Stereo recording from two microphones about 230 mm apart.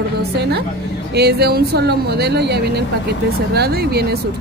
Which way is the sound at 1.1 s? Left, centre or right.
Right.